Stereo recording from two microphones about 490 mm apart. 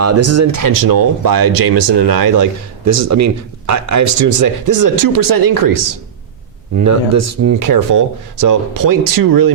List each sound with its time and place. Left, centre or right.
0.0 s speech: right
6.8 s speech: right